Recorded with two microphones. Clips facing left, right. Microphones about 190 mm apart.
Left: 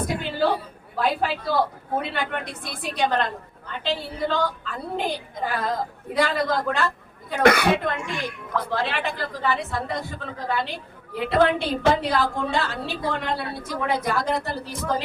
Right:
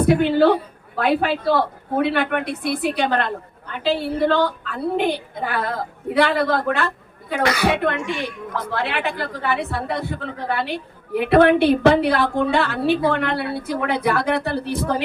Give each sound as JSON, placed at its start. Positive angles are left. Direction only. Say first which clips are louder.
{"t": 0.0, "sound": "a woman's voice", "louder": "right 9 dB", "side_deg": -65}
{"t": 7.4, "sound": "speech", "louder": "left 3 dB", "side_deg": 55}
{"t": 7.7, "sound": "a woman's voice", "louder": "right 3 dB", "side_deg": -65}